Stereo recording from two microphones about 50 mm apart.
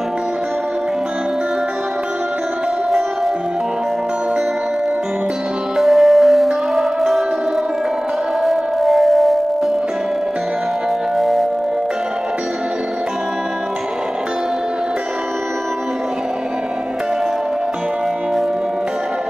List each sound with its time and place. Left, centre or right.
5.8 s music: centre
8.5 s singing bowl: centre
11.1 s singing bowl: centre